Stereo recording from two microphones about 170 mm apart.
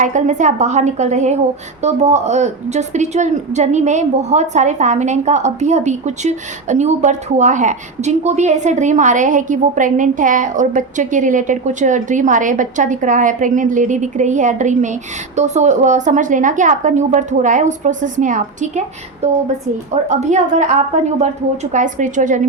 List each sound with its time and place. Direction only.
0.0 s a woman's voice: 45° right (ahead or behind)